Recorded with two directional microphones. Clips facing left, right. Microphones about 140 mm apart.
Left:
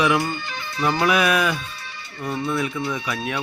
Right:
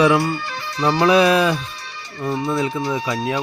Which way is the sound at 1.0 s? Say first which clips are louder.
Right 6 dB; 30° right (ahead or behind).